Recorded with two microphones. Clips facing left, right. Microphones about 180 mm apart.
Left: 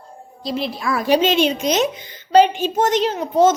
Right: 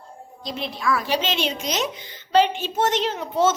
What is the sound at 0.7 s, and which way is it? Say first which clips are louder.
Speech: left 1 dB; 40° left (ahead or behind).